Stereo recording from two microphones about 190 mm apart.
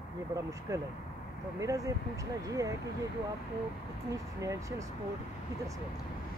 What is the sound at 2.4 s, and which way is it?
Speech, 15° right (ahead or behind).